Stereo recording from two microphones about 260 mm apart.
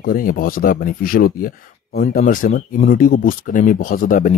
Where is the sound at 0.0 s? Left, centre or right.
Left.